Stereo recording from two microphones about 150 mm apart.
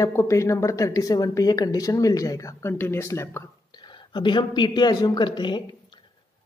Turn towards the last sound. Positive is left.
turn(degrees=30)  # may be behind; listen again after turning